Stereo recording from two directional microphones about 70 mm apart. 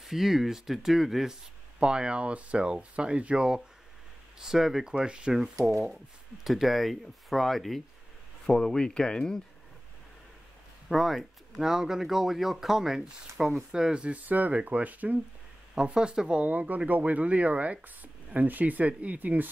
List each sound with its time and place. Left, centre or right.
0.0 s speech: centre
1.8 s speech: centre
5.7 s speech: centre
10.9 s speech: centre; by 15.1 s right
15.7 s speech: centre